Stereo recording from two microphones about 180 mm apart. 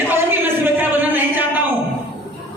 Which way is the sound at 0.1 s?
10° right (ahead or behind).